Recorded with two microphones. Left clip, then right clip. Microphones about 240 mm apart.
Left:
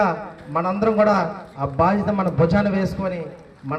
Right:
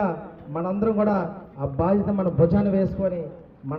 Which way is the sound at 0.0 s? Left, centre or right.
Left.